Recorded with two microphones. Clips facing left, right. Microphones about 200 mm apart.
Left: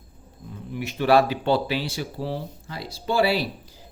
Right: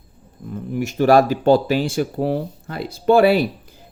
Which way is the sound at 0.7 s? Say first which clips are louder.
Right 5 dB; 45° right (ahead or behind).